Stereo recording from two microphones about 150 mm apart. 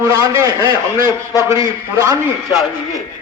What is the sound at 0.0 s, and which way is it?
A man's voice, 25° right (ahead or behind).